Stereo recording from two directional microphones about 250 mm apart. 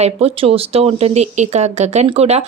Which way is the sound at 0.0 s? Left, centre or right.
Right.